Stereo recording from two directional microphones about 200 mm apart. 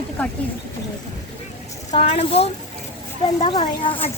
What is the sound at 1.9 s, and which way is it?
Speech, 35° left (ahead or behind).